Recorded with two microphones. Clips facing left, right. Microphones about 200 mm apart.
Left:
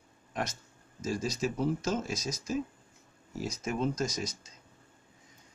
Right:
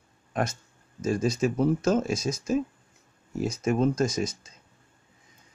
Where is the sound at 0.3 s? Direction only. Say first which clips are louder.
Right 7 dB; 50° right (ahead or behind).